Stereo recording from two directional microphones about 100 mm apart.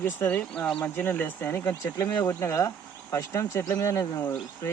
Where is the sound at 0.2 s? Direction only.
15° left (ahead or behind).